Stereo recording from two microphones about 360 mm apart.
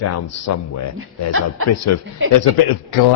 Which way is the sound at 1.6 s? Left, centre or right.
Left.